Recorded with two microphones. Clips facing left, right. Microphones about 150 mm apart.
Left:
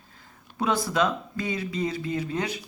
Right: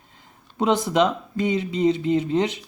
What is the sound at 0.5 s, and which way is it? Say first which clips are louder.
Speech: right 5 dB; 20° right (ahead or behind).